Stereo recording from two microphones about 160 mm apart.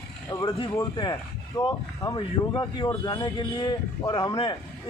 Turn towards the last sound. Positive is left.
turn(degrees=30)  # may be behind; listen again after turning